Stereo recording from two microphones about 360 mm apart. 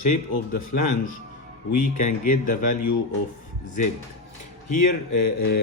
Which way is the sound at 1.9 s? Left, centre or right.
Left.